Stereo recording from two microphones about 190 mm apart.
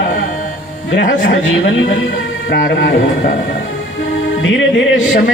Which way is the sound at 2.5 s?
60° left (ahead or behind).